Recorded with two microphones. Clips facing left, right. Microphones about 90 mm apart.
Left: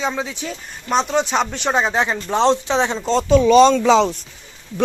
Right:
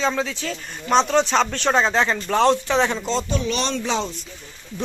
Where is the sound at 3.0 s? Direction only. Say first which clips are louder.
Left 5 dB; 45° left (ahead or behind).